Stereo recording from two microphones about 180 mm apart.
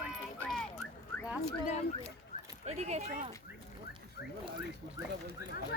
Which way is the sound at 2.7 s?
35° right (ahead or behind).